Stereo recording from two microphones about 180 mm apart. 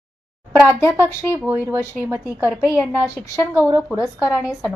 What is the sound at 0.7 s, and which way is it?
Speech, 15° left (ahead or behind).